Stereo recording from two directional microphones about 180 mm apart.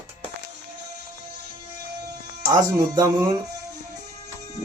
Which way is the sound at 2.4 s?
20° right (ahead or behind).